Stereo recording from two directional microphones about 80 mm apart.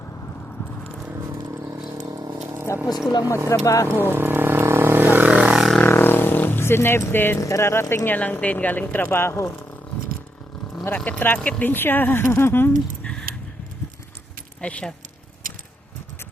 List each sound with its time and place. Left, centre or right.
2.0 s a sound: right
2.7 s speech: left
3.2 s speech: right
3.6 s speech: left
3.8 s vehicle: right
5.3 s music: centre
5.8 s a sound: left
7.3 s speech: left
10.9 s speech: centre
14.6 s speech: centre